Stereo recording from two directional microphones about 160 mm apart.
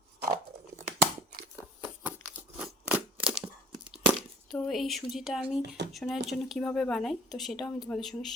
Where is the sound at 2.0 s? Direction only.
10° right (ahead or behind).